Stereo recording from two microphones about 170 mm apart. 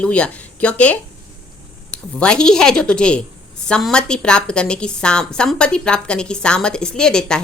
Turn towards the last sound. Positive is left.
turn(degrees=5)  # may be behind; listen again after turning